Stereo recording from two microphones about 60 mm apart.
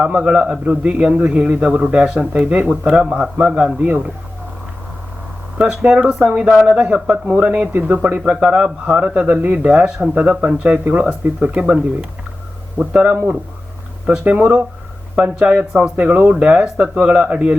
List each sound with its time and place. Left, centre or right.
0.0 s speech: right
1.4 s a man's voice: centre
3.8 s speech: right
5.5 s speech: centre
7.7 s speech: right
8.1 s a man's voice: right
9.1 s speech: right
12.8 s a man's voice: right
16.0 s speech: right